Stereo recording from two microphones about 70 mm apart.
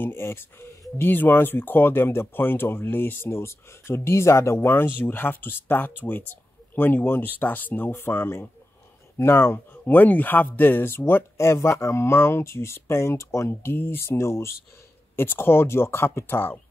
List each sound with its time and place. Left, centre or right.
0.0 s speech: left
4.6 s speech: left
9.8 s speech: left